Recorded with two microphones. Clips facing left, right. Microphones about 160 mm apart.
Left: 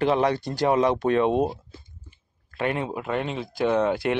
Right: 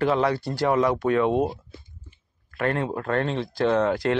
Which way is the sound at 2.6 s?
15° left (ahead or behind).